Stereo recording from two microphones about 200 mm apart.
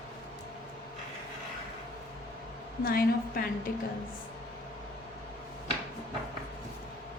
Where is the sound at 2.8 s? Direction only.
45° left (ahead or behind).